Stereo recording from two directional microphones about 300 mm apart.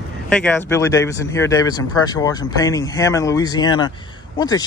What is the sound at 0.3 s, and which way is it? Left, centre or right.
Speech, centre.